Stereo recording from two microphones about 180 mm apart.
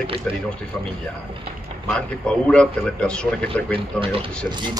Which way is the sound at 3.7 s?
30° right (ahead or behind).